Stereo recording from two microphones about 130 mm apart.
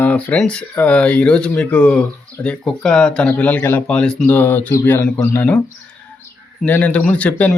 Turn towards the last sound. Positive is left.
turn(degrees=10)  # may be behind; listen again after turning